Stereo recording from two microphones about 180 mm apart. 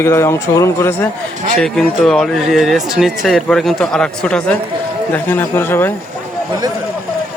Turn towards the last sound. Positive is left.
turn(degrees=10)  # may be behind; listen again after turning